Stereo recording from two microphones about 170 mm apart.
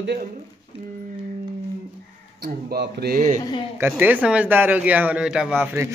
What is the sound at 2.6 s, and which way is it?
Speech, 70° right (ahead or behind).